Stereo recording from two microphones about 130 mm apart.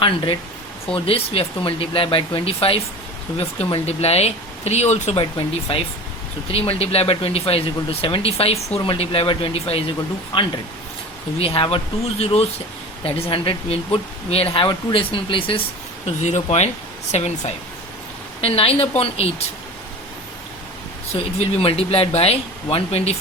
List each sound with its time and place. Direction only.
0.9 s speech: 45° left (ahead or behind)
5.2 s speech: 45° left (ahead or behind)
16.0 s speech: 60° left (ahead or behind)
21.1 s speech: 50° left (ahead or behind)